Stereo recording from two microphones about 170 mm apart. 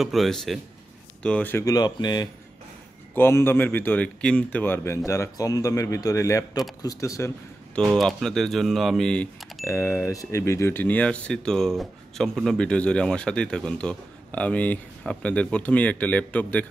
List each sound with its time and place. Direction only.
0.0 s speech: centre (ahead or behind); by 2.2 s 25° left (ahead or behind)
3.2 s speech: 15° left (ahead or behind)
7.9 s speech: centre (ahead or behind)
9.7 s speech: 15° left (ahead or behind)